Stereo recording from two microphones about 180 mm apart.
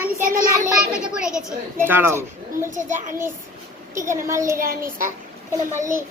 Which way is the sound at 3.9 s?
15° right (ahead or behind).